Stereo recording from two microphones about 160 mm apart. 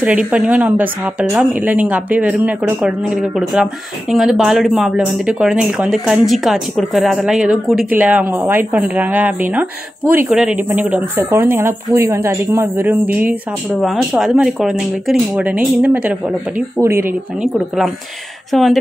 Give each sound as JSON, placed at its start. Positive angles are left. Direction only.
{"t": 0.3, "sound": "a woman's voice", "side_deg": -10}